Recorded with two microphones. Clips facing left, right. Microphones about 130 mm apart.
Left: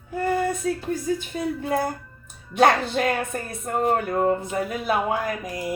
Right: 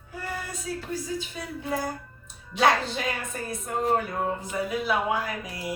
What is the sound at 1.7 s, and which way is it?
Speech, 55° left (ahead or behind).